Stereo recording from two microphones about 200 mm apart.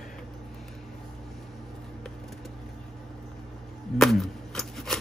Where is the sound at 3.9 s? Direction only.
Centre (ahead or behind).